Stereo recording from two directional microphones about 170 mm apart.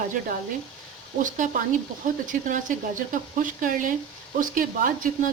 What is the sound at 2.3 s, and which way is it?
Speech, 50° right (ahead or behind).